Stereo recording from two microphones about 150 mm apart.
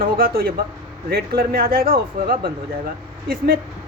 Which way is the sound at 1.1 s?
90° right.